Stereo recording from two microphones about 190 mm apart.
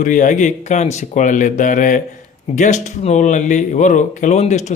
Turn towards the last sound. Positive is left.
turn(degrees=40)  # may be behind; listen again after turning